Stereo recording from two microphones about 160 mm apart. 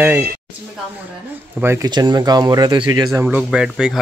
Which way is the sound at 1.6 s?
20° right (ahead or behind).